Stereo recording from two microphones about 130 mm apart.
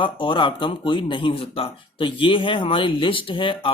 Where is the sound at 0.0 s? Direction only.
40° left (ahead or behind).